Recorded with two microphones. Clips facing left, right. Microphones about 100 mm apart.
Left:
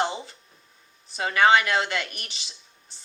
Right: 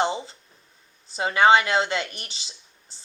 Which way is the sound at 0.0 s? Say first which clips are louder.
Right 3 dB; 25° right (ahead or behind).